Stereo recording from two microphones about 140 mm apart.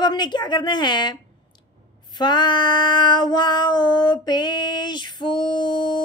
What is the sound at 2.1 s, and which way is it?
Female singing, 30° left (ahead or behind).